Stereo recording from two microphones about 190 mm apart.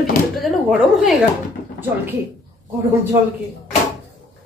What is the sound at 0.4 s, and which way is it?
Speech, centre (ahead or behind).